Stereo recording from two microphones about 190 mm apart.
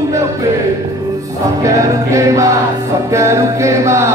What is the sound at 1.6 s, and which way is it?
Music, 15° right (ahead or behind).